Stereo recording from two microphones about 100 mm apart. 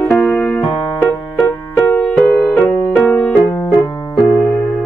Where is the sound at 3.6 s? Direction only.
30° left (ahead or behind).